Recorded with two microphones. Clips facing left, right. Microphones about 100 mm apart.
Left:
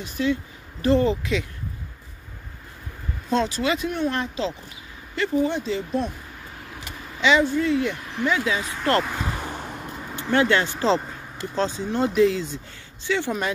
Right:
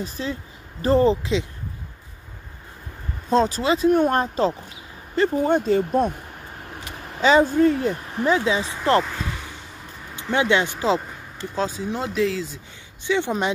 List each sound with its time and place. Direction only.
0.0 s speech: 35° right (ahead or behind)
3.3 s speech: 40° right (ahead or behind)
4.0 s speech: 45° right (ahead or behind)
7.2 s speech: 40° right (ahead or behind); by 9.0 s 20° right (ahead or behind)
9.4 s a sound: 55° left (ahead or behind)
10.1 s speech: 15° right (ahead or behind)
13.0 s speech: 20° right (ahead or behind)